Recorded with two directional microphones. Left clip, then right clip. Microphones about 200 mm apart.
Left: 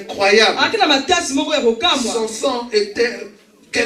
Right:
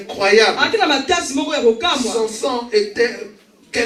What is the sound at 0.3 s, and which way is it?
Speech, 35° left (ahead or behind).